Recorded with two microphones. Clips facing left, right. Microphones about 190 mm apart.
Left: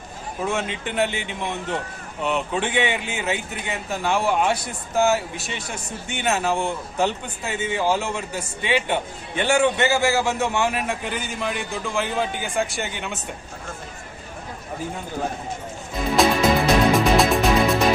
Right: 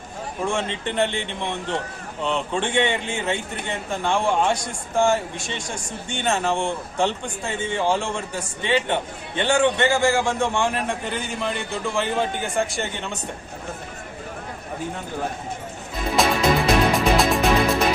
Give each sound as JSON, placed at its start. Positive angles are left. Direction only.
{"t": 0.4, "sound": "a man's voice", "side_deg": 5}
{"t": 16.1, "sound": "music", "side_deg": 0}